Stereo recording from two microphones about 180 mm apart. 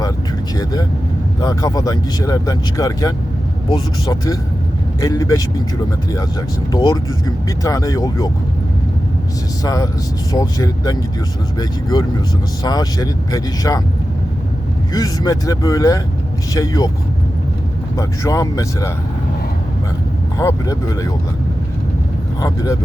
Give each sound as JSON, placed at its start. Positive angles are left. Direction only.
{"t": 0.5, "sound": "vehicle", "side_deg": 20}
{"t": 1.4, "sound": "speech", "side_deg": 20}
{"t": 6.7, "sound": "speech", "side_deg": 20}
{"t": 9.6, "sound": "speech", "side_deg": 20}
{"t": 14.9, "sound": "speech", "side_deg": 20}
{"t": 17.9, "sound": "speech", "side_deg": 15}
{"t": 20.4, "sound": "speech", "side_deg": 20}
{"t": 22.4, "sound": "speech", "side_deg": 20}